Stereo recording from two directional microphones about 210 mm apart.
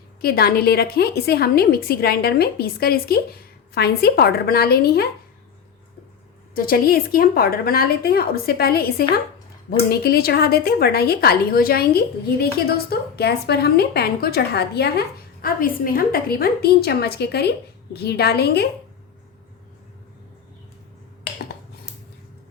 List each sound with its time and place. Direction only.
0.2 s a woman's voice: 45° left (ahead or behind)
6.5 s a woman's voice: 45° left (ahead or behind)